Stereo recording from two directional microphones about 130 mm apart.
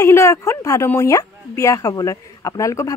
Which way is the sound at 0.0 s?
20° left (ahead or behind).